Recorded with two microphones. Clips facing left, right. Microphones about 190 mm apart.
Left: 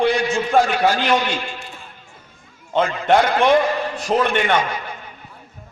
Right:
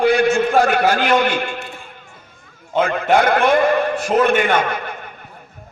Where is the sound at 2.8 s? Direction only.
55° right (ahead or behind).